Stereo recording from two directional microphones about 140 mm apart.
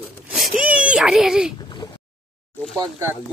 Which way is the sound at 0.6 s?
10° right (ahead or behind).